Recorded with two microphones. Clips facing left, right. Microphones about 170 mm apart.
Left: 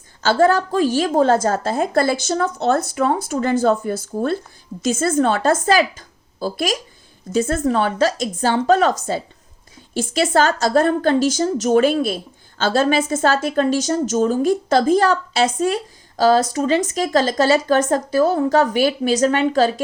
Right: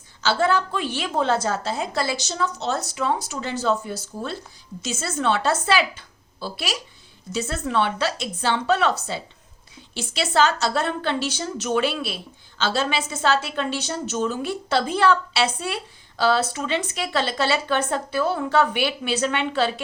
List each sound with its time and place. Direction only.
0.2 s a woman's voice: 45° left (ahead or behind)